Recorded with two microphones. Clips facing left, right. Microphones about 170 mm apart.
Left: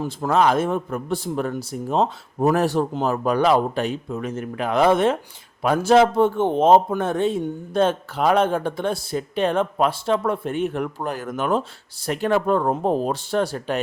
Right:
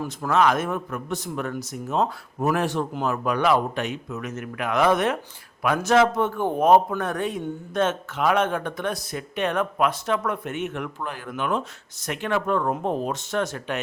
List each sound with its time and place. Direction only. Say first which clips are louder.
0.0 s a man's voice: left 2 dB; 30° left (ahead or behind)